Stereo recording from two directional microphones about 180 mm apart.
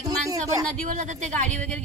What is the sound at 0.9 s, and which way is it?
Speech, 45° right (ahead or behind).